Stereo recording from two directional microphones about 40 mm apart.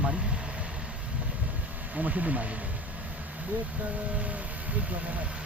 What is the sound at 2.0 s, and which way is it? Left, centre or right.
Speech, right.